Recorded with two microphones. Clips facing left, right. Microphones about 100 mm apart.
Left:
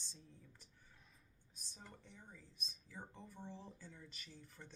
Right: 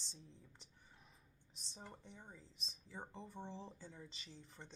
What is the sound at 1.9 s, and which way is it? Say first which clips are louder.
Speech: right 2 dB; 25° right (ahead or behind).